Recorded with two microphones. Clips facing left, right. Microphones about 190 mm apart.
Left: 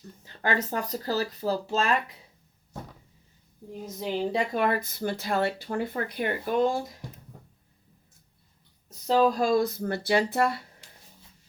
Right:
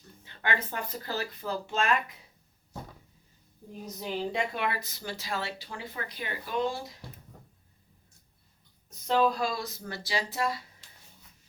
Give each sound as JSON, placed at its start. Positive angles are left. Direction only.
{"t": 0.3, "sound": "speech", "side_deg": 40}
{"t": 3.8, "sound": "speech", "side_deg": 30}
{"t": 9.0, "sound": "speech", "side_deg": 35}